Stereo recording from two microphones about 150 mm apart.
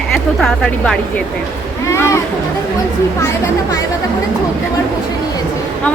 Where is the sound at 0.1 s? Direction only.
Centre (ahead or behind).